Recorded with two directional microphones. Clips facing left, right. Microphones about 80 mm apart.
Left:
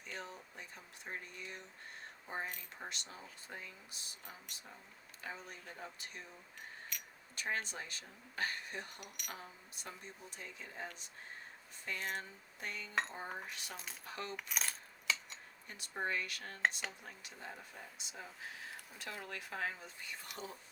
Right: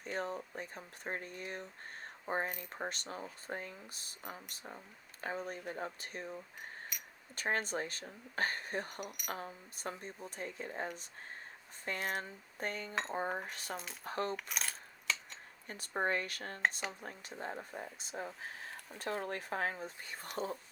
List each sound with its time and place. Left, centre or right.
0.0 s speech: right
6.9 s a sound: centre
7.3 s speech: right
11.9 s speech: right
14.3 s speech: centre
15.6 s speech: right